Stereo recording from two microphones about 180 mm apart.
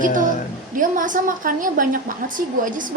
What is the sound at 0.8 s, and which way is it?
A woman's voice, 45° right (ahead or behind).